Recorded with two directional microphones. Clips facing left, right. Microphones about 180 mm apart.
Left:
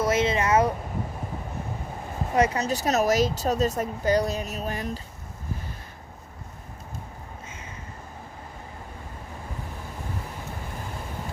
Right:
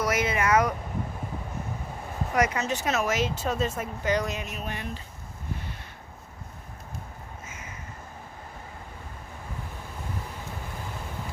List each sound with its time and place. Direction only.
0.0 s speech: 25° left (ahead or behind)
2.3 s speech: 30° left (ahead or behind)